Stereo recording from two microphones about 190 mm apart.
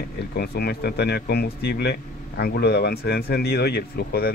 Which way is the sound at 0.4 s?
55° left (ahead or behind).